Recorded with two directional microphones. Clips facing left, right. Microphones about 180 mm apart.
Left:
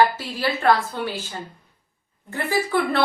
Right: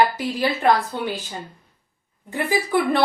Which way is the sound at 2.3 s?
15° right (ahead or behind).